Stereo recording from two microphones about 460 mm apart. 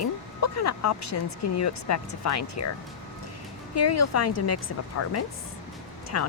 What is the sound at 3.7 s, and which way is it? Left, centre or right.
Speech, left.